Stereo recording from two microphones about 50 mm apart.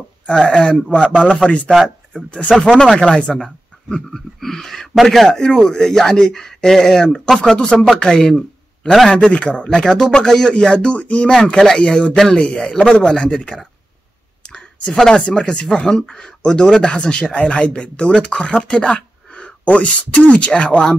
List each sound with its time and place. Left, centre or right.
0.3 s speech: centre
2.5 s speech: centre
2.8 s a man's voice: centre
9.3 s speech: left
14.4 s a sound: centre
15.2 s speech: centre